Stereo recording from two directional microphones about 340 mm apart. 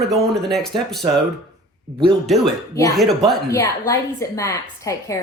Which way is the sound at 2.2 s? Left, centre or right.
Centre.